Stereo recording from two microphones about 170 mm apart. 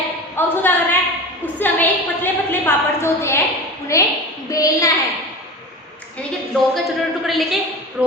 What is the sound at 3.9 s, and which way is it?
A woman's voice, 20° left (ahead or behind).